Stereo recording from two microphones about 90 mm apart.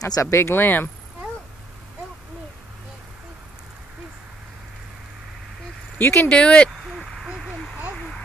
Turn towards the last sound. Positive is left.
turn(degrees=0)  # may be behind; listen again after turning